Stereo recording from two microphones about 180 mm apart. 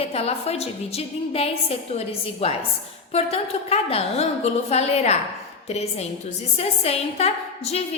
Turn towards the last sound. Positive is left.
turn(degrees=35)  # may be behind; listen again after turning